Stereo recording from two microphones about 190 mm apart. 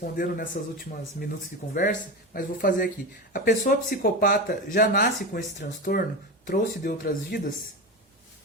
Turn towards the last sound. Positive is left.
turn(degrees=50)  # may be behind; listen again after turning